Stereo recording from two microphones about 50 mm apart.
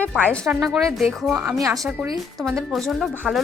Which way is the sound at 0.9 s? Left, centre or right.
Centre.